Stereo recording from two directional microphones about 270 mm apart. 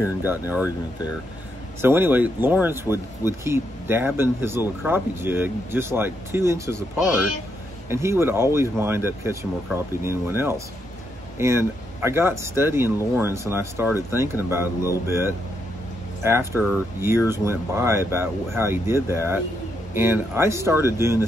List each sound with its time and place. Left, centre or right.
0.0 s speech: centre
1.8 s speech: centre
7.9 s speech: centre